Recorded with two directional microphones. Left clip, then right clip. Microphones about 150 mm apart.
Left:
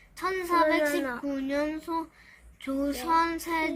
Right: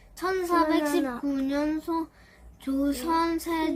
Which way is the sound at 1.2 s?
20° left (ahead or behind).